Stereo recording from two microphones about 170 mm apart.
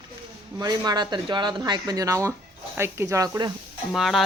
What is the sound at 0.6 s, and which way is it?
Speech, 25° right (ahead or behind).